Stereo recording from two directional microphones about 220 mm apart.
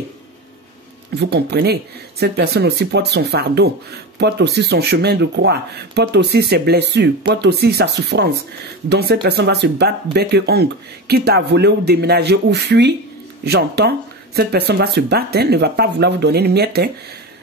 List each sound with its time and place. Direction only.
1.1 s speech: 50° right (ahead or behind)